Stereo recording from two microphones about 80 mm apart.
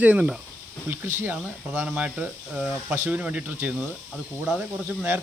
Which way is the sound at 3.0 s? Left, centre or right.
Centre.